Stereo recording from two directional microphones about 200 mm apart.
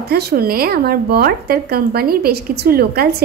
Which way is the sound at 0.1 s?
50° right (ahead or behind).